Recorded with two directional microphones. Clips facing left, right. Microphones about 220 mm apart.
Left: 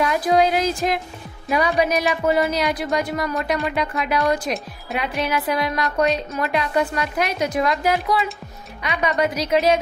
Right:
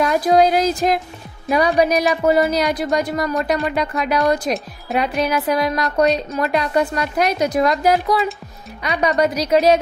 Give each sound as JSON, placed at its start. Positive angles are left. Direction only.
{"t": 0.0, "sound": "speech", "side_deg": -40}